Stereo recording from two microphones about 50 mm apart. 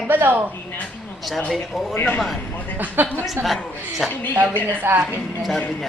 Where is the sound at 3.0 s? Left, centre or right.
Right.